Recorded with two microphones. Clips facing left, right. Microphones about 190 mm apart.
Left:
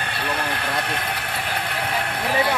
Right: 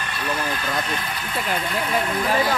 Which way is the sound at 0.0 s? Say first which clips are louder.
Even; 65° left (ahead or behind).